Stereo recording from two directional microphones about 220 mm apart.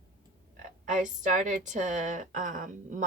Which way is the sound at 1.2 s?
35° right (ahead or behind).